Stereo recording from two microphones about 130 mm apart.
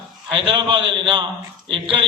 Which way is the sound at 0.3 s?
45° right (ahead or behind).